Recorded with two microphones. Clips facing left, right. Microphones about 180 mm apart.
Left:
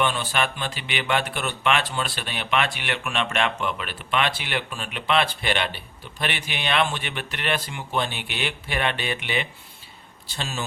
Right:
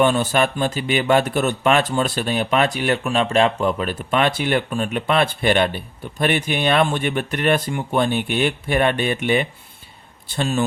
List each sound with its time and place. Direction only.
0.0 s a man's voice: 45° right (ahead or behind)